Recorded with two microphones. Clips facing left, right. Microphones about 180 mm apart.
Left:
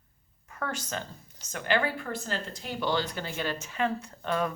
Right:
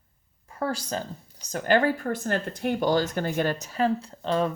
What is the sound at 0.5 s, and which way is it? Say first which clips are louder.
Speech: right 6 dB; 35° right (ahead or behind).